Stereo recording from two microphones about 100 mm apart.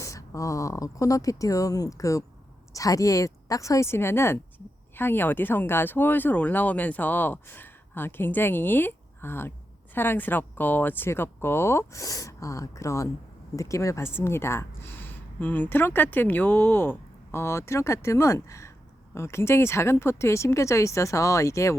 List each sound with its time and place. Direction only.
0.0 s speech: 30° left (ahead or behind)